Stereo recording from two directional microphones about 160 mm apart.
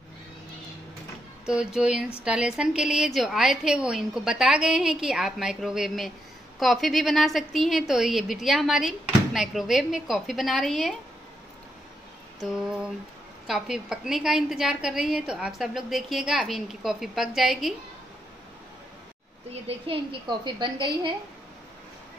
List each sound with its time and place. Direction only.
1.4 s a woman's voice: 5° right (ahead or behind)
12.4 s a woman's voice: 5° right (ahead or behind)
19.7 s a woman's voice: 35° right (ahead or behind)